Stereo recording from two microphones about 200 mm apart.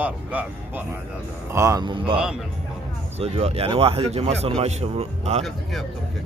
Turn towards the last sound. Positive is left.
turn(degrees=0)  # may be behind; listen again after turning